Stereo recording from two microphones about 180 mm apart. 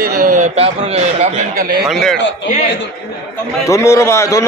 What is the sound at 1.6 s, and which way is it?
Speech, 55° right (ahead or behind).